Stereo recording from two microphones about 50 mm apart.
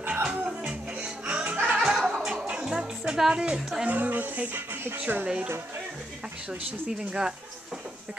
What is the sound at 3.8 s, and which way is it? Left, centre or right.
Speech, right.